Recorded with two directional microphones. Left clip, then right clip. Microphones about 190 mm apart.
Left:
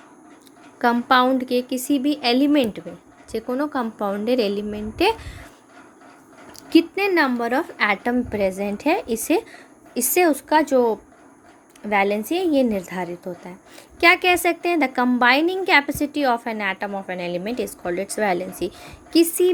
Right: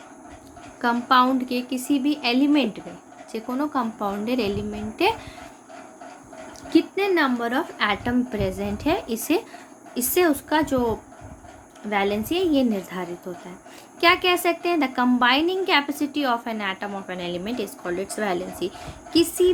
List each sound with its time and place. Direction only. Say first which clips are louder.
0.8 s a woman's voice: left 2 dB; 40° left (ahead or behind)
6.7 s a woman's voice: left 3 dB; 40° left (ahead or behind)